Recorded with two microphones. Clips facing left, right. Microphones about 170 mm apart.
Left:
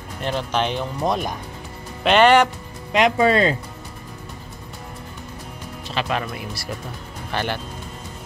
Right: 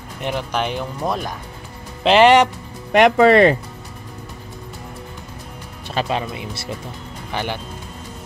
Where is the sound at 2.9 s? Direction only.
65° right (ahead or behind).